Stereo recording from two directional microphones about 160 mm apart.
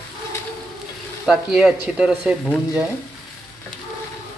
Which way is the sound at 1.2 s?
5° right (ahead or behind).